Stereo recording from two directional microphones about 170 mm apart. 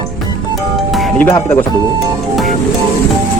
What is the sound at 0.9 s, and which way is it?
Music, centre (ahead or behind).